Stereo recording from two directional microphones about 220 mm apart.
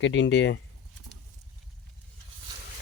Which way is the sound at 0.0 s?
55° left (ahead or behind).